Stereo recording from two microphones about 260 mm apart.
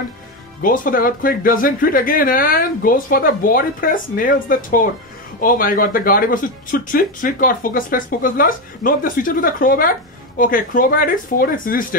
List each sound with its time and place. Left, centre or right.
0.6 s speech: left